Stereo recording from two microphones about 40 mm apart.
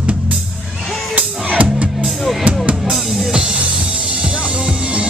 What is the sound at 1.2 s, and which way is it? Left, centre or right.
Music, right.